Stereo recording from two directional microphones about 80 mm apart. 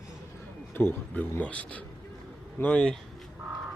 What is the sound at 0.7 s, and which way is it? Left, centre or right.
Speech, left.